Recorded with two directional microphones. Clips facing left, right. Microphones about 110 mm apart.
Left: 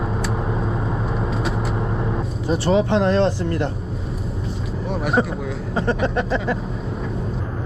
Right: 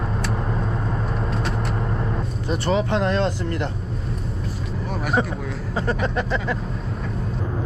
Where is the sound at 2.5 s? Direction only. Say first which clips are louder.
Left 4 dB; 25° left (ahead or behind).